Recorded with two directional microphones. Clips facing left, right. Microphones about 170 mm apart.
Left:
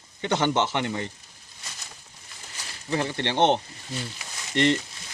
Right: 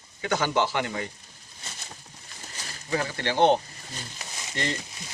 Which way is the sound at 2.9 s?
25° left (ahead or behind).